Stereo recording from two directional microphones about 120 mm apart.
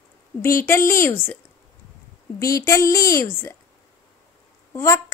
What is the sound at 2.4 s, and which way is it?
A woman's voice, 25° left (ahead or behind).